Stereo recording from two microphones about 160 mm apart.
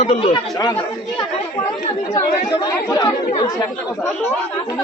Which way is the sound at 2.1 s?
25° left (ahead or behind).